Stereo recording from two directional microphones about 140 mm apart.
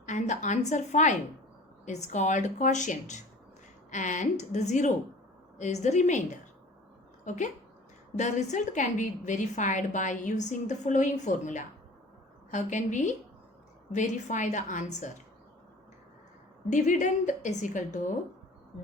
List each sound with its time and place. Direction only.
0.0 s a woman's voice: 60° left (ahead or behind)
7.3 s a woman's voice: 60° left (ahead or behind)
16.6 s a woman's voice: 65° left (ahead or behind)